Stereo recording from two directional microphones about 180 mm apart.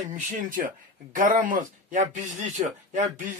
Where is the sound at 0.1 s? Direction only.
45° right (ahead or behind).